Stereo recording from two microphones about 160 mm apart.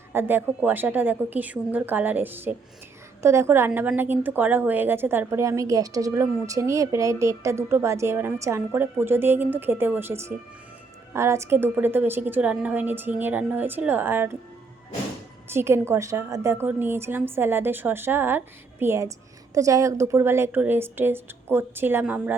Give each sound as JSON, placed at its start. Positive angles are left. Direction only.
{"t": 0.1, "sound": "a woman's voice", "side_deg": -15}
{"t": 15.4, "sound": "a woman's voice", "side_deg": -15}